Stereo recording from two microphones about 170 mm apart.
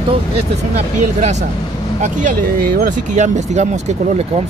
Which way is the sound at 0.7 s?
40° right (ahead or behind).